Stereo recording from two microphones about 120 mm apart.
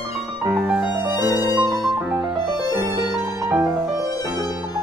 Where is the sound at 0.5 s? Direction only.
10° right (ahead or behind).